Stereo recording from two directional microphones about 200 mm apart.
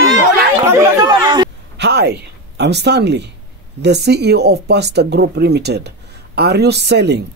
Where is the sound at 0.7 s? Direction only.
15° right (ahead or behind).